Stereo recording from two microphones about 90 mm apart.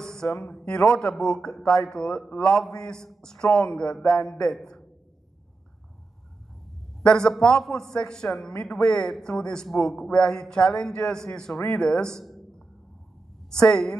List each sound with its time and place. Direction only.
0.0 s a sound: 5° left (ahead or behind)
0.4 s a man's voice: 5° left (ahead or behind)
7.0 s a man's voice: 10° left (ahead or behind)